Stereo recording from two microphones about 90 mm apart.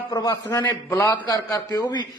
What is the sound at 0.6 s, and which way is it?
Speech, 25° left (ahead or behind).